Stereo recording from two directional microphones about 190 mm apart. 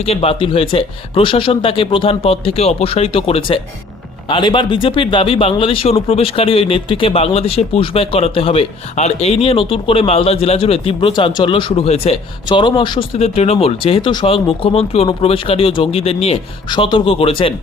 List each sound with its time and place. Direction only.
0.0 s speech: 30° left (ahead or behind)